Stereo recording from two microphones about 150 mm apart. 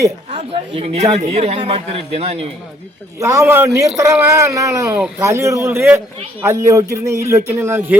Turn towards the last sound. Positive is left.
turn(degrees=-15)  # may be behind; listen again after turning